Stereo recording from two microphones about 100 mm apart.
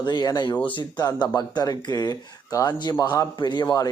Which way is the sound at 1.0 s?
40° left (ahead or behind).